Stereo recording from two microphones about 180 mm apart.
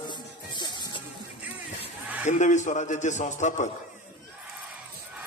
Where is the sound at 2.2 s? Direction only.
40° left (ahead or behind).